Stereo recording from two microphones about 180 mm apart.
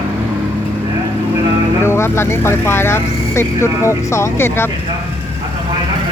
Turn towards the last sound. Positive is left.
turn(degrees=15)  # may be behind; listen again after turning